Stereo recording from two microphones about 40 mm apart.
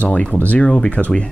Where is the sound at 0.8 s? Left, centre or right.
Left.